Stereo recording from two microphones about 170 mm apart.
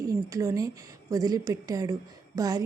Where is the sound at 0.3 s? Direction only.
20° right (ahead or behind).